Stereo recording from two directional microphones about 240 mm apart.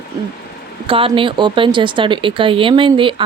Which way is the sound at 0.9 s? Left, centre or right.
Right.